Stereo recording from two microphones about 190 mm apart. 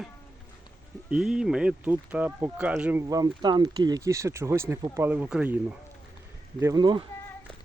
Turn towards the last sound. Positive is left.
turn(degrees=-25)  # may be behind; listen again after turning